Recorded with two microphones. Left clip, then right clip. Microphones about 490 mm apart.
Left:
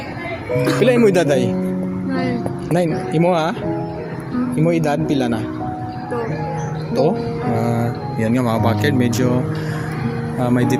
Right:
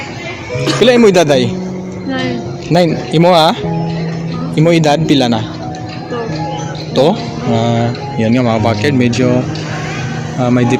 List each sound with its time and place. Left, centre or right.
0.7 s speech: left
2.7 s speech: left
4.5 s speech: left
8.2 s speech: left
10.4 s speech: left